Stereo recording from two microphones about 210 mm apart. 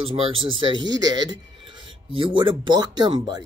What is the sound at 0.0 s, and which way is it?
Speech, 25° right (ahead or behind).